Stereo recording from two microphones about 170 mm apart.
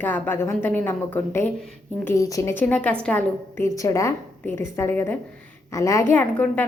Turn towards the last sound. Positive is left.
turn(degrees=10)  # may be behind; listen again after turning